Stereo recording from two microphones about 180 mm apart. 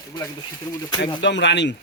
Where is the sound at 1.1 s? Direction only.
80° left.